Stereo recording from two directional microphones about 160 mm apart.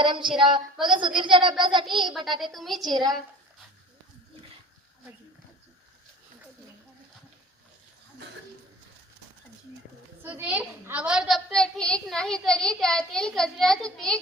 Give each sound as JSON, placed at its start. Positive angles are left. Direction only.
{"t": 0.0, "sound": "a woman's voice", "side_deg": -30}
{"t": 2.4, "sound": "a woman's voice", "side_deg": 0}
{"t": 2.8, "sound": "a woman's voice", "side_deg": -25}
{"t": 10.2, "sound": "a woman's voice", "side_deg": -10}